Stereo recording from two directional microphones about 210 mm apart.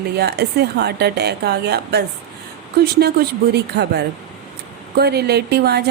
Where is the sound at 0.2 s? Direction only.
50° right (ahead or behind).